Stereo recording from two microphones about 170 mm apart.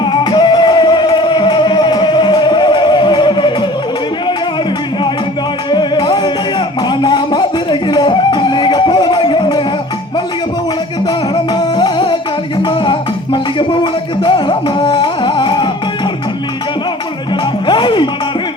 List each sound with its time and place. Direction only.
0.0 s music: 25° left (ahead or behind)
5.7 s music: 25° left (ahead or behind)
11.5 s music: 25° left (ahead or behind)
17.7 s music: 30° left (ahead or behind)